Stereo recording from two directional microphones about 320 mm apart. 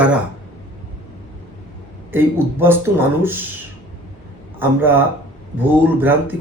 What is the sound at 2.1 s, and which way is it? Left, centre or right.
Speech, centre.